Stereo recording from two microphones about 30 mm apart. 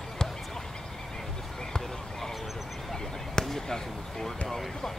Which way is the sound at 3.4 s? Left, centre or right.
Left.